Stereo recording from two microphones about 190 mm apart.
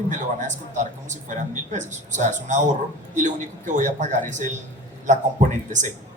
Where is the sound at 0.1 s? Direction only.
40° right (ahead or behind).